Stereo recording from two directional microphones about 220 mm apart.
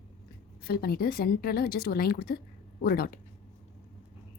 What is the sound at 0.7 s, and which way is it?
A woman's voice, 45° left (ahead or behind).